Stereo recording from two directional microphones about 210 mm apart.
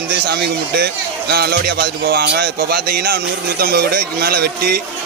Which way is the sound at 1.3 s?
50° right (ahead or behind).